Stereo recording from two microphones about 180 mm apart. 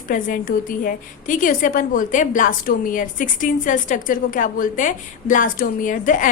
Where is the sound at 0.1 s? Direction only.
50° left (ahead or behind).